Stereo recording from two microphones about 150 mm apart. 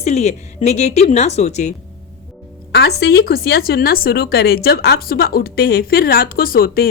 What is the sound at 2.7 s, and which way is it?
A woman's voice, 90° left.